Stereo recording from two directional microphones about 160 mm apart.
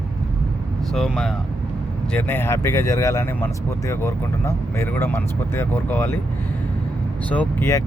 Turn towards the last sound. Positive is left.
turn(degrees=15)  # may be behind; listen again after turning